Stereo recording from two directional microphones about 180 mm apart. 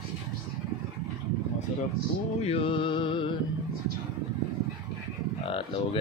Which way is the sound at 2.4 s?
30° left (ahead or behind).